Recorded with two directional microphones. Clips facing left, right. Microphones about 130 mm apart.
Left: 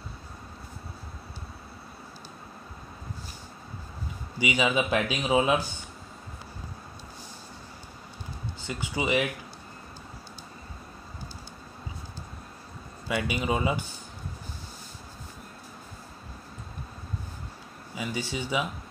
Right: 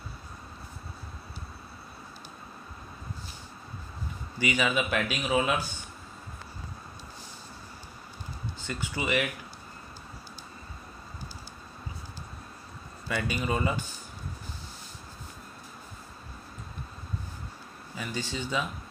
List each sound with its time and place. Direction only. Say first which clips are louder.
4.4 s speech: left 2 dB; 15° left (ahead or behind)
8.6 s speech: left 3 dB; 15° left (ahead or behind)
13.1 s speech: left 2 dB; 15° left (ahead or behind)
17.9 s speech: left 2 dB; 15° left (ahead or behind)